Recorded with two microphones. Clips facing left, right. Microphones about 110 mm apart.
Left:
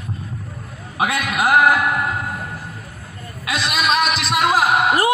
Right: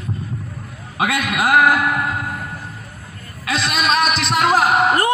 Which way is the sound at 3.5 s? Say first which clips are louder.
Right 1 dB; 10° left (ahead or behind).